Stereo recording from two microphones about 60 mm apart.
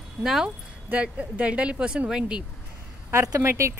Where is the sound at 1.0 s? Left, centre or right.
Centre.